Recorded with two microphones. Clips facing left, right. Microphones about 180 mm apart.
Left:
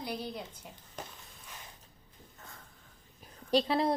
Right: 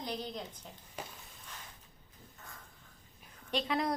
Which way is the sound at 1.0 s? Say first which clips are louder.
Even; 10° right (ahead or behind).